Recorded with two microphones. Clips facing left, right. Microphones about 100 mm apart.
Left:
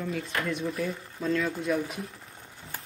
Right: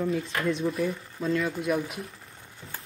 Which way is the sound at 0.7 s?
5° right (ahead or behind).